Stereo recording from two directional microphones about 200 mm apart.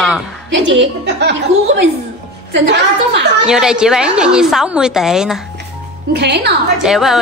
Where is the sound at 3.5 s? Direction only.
5° right (ahead or behind).